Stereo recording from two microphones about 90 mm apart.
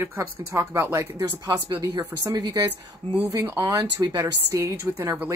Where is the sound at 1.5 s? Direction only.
40° right (ahead or behind).